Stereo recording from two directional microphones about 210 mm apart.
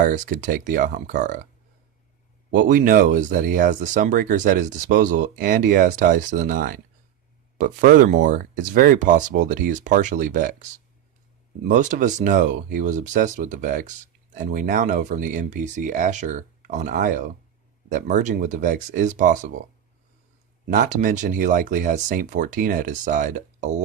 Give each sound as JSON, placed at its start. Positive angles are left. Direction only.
{"t": 0.0, "sound": "speech", "side_deg": -40}
{"t": 2.5, "sound": "speech", "side_deg": -40}
{"t": 11.7, "sound": "speech", "side_deg": -35}
{"t": 20.7, "sound": "speech", "side_deg": -35}